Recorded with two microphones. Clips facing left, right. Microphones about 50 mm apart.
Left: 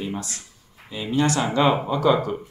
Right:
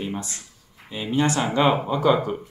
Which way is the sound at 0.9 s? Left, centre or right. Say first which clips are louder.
Even; centre.